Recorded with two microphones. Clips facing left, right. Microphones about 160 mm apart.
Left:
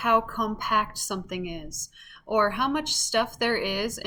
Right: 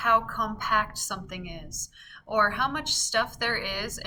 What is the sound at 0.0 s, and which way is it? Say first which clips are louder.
A woman's voice: left 2 dB; 15° left (ahead or behind).